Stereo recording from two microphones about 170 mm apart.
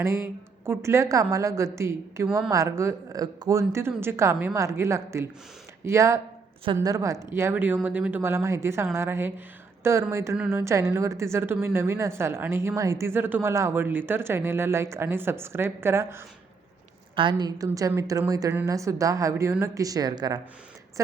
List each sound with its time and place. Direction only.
0.0 s a woman's voice: 15° right (ahead or behind)
17.2 s a woman's voice: 25° right (ahead or behind)